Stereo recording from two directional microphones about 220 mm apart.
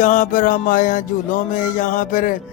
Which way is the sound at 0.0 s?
35° left (ahead or behind).